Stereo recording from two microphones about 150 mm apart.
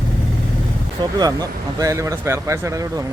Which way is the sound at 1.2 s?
25° right (ahead or behind).